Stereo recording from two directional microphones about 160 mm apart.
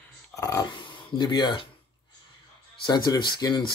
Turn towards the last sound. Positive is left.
turn(degrees=25)  # may be behind; listen again after turning